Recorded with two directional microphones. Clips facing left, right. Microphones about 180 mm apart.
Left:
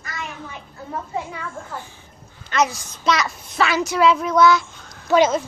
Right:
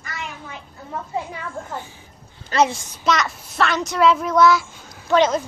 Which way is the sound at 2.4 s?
30° right (ahead or behind).